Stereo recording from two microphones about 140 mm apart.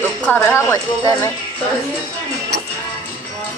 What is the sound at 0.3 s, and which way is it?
Speech, 10° left (ahead or behind).